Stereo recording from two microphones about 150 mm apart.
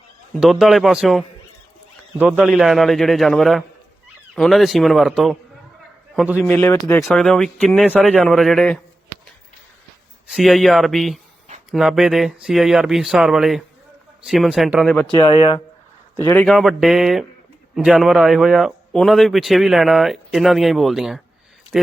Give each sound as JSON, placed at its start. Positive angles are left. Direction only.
{"t": 0.3, "sound": "a man's voice", "side_deg": 0}
{"t": 6.4, "sound": "a man's voice", "side_deg": 15}
{"t": 7.0, "sound": "a man's voice", "side_deg": 5}
{"t": 10.2, "sound": "a man's voice", "side_deg": 0}
{"t": 15.1, "sound": "speech", "side_deg": 30}
{"t": 16.2, "sound": "a man's voice", "side_deg": 15}
{"t": 16.5, "sound": "a man's voice", "side_deg": 0}